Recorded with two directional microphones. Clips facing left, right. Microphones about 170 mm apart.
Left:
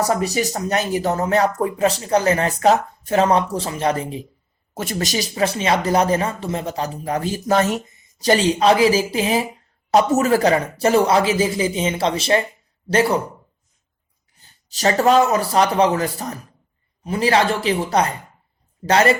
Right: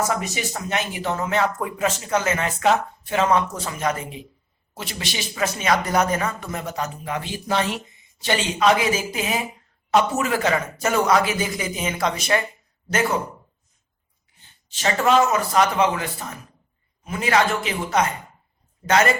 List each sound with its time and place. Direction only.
0.0 s speech: 35° left (ahead or behind)
4.7 s speech: 45° left (ahead or behind); by 13.1 s 30° left (ahead or behind)
14.3 s speech: 40° left (ahead or behind)